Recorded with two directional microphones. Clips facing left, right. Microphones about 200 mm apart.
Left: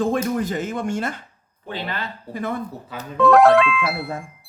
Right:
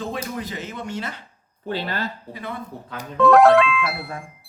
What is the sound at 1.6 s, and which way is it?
Speech, 45° right (ahead or behind).